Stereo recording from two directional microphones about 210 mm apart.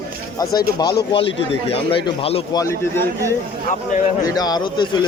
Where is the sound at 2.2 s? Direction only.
30° left (ahead or behind).